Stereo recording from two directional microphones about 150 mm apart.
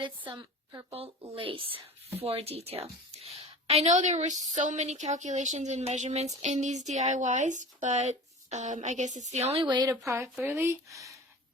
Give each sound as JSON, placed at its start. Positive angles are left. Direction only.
{"t": 0.0, "sound": "a woman's voice", "side_deg": -30}
{"t": 0.9, "sound": "speech", "side_deg": -40}
{"t": 9.6, "sound": "speech", "side_deg": -30}
{"t": 10.4, "sound": "speech", "side_deg": -15}